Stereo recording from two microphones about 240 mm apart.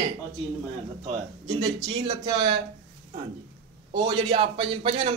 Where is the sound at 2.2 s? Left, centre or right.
Centre.